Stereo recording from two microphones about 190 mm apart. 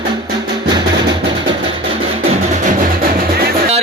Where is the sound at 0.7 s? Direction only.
25° right (ahead or behind); by 3.6 s 55° right (ahead or behind).